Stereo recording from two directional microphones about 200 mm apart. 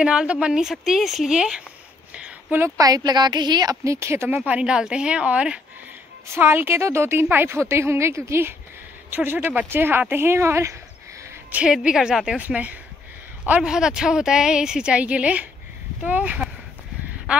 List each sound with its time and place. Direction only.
0.0 s a woman's voice: 5° right (ahead or behind)